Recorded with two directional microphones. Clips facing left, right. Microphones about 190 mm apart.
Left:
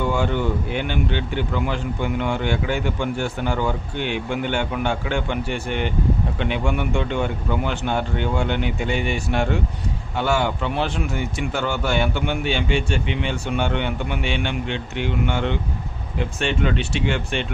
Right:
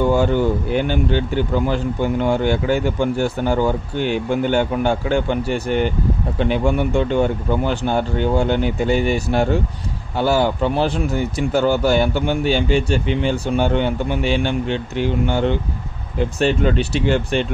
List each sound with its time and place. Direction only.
0.0 s speech: 40° right (ahead or behind)